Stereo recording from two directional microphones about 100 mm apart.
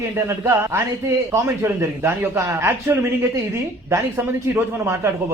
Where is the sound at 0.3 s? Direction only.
25° right (ahead or behind).